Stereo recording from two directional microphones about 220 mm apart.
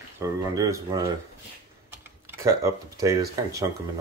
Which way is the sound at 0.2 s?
15° right (ahead or behind).